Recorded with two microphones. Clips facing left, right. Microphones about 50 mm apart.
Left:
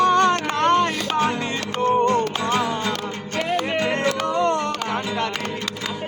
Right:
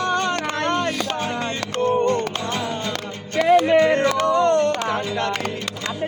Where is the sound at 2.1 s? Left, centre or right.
Left.